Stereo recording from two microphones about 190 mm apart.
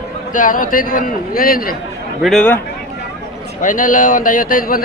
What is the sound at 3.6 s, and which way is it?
A man's voice, 45° left (ahead or behind).